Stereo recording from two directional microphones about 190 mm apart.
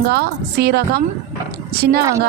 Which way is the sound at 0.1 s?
55° right (ahead or behind).